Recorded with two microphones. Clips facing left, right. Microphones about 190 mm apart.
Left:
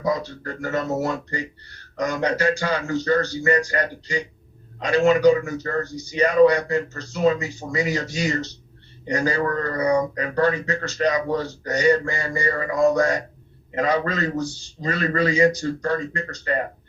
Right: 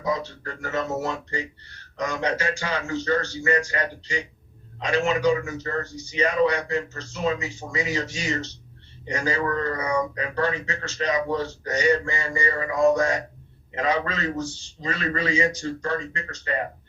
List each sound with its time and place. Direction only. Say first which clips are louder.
0.0 s speech: left 3 dB; 40° left (ahead or behind)